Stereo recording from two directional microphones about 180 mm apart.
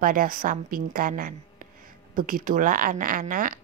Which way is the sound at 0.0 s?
50° right (ahead or behind).